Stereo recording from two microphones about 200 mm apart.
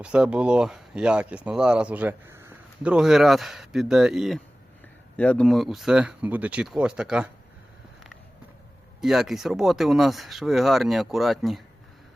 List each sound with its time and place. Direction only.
0.0 s speech: 5° right (ahead or behind)
9.0 s speech: centre (ahead or behind)